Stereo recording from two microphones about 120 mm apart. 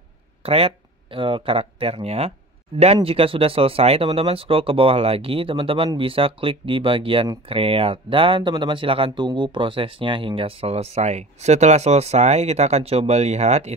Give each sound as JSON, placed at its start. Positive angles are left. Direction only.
{"t": 0.4, "sound": "speech", "side_deg": -55}